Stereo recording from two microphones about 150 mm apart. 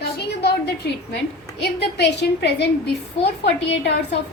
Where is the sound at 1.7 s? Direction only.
90° left.